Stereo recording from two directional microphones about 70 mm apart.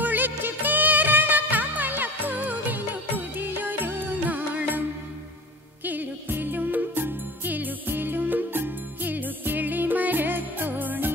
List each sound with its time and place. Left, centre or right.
0.0 s music of bollywood: right
5.9 s music: right